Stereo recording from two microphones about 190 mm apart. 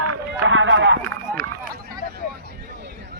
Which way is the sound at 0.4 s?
90° right.